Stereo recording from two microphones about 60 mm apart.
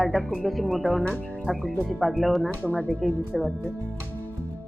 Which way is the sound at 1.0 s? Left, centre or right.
Left.